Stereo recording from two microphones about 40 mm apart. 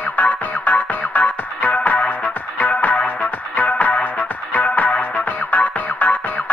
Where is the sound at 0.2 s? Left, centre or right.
Left.